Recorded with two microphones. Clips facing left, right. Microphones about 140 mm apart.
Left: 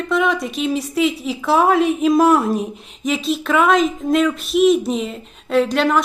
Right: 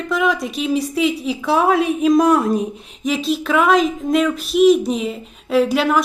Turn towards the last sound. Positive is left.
turn(degrees=-5)  # may be behind; listen again after turning